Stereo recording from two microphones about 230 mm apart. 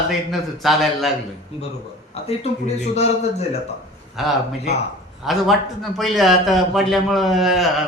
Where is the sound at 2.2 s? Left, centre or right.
Left.